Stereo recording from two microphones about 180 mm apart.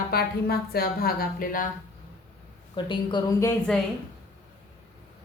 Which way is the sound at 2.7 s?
25° left (ahead or behind).